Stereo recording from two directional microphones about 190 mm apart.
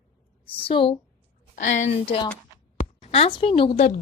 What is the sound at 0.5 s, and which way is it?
Speech, 30° left (ahead or behind).